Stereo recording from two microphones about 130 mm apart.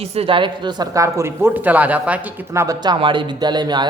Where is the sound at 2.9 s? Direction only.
40° right (ahead or behind).